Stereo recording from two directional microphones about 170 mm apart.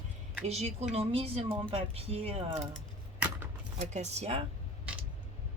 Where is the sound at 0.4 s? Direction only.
40° right (ahead or behind).